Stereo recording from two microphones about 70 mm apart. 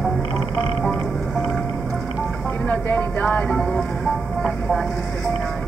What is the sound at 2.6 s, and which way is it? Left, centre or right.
Speech, left.